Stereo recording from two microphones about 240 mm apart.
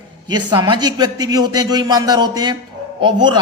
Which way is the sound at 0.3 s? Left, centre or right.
Centre.